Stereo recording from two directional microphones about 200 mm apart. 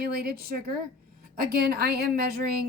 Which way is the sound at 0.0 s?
50° right (ahead or behind).